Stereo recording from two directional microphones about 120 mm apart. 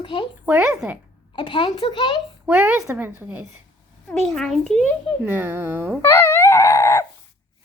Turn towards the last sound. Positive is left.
turn(degrees=25)  # may be behind; listen again after turning